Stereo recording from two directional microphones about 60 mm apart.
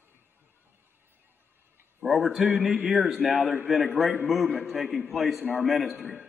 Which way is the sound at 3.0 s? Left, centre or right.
Centre.